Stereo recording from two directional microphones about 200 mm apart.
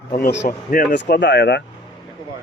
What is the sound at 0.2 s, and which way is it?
Speech, 45° left (ahead or behind).